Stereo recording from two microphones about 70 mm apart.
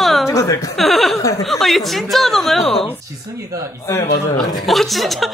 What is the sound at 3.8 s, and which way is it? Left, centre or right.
Speech, left.